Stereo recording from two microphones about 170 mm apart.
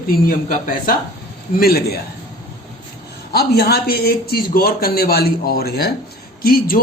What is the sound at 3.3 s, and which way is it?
Speech, 70° left (ahead or behind).